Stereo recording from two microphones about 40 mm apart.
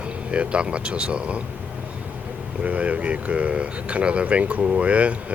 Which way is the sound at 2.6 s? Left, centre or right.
Right.